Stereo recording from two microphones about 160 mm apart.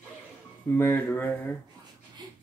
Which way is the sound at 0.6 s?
10° left (ahead or behind).